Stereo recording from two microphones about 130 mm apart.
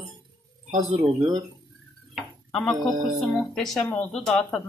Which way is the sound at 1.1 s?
40° right (ahead or behind).